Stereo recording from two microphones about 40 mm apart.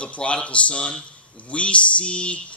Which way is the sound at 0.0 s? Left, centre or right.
Left.